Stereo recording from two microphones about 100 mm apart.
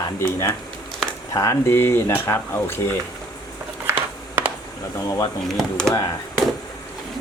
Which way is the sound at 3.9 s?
20° right (ahead or behind).